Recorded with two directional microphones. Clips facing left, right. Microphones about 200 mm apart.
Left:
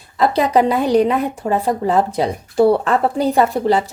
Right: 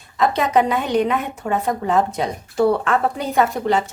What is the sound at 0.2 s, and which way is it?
Speech, 35° left (ahead or behind).